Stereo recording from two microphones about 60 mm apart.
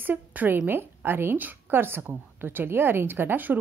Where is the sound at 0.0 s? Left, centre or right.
Right.